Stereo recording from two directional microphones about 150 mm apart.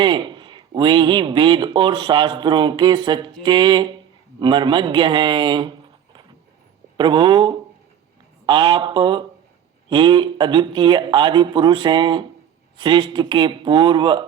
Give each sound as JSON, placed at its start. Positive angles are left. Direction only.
{"t": 0.0, "sound": "a man's voice", "side_deg": -30}
{"t": 6.9, "sound": "a man's voice", "side_deg": -30}